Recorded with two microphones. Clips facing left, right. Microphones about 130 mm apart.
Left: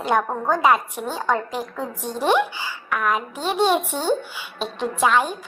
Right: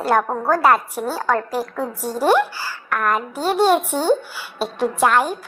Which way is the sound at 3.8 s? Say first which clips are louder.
Right 4 dB; 15° right (ahead or behind).